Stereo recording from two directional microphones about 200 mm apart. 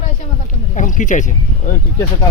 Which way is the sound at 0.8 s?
40° left (ahead or behind).